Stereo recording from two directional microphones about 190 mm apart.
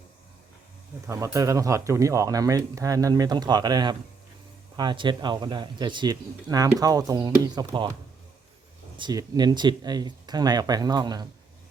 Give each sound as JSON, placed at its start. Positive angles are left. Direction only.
{"t": 1.0, "sound": "speech", "side_deg": -15}
{"t": 9.0, "sound": "speech", "side_deg": -20}